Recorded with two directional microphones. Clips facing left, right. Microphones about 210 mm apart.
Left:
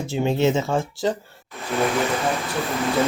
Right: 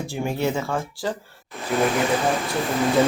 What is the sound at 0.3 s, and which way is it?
Speech, 20° left (ahead or behind).